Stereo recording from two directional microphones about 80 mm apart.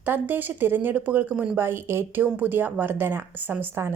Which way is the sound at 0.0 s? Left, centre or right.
Right.